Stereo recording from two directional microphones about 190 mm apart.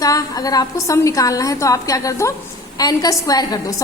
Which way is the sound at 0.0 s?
20° left (ahead or behind).